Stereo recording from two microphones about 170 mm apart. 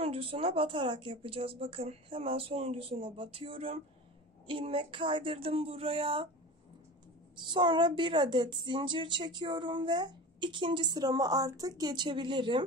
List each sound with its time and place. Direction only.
0.0 s speech: 35° right (ahead or behind)
7.4 s a woman's voice: 30° right (ahead or behind)